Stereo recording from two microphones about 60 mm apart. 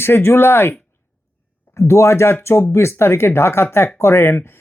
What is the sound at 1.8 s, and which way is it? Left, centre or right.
Speech, left.